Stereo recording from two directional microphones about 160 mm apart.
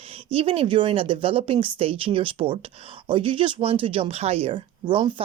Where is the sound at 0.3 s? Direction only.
35° right (ahead or behind).